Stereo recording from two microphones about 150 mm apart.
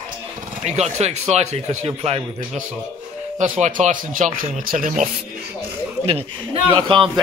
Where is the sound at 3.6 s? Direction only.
55° right (ahead or behind).